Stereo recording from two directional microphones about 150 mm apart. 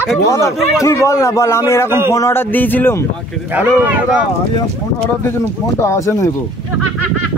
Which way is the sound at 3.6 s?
10° right (ahead or behind).